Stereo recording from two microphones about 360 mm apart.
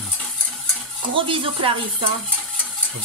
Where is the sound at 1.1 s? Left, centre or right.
Centre.